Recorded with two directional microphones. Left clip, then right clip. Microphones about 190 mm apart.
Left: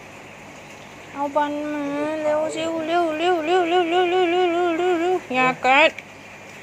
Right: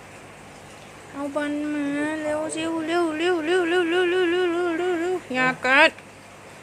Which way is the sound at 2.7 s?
20° right (ahead or behind).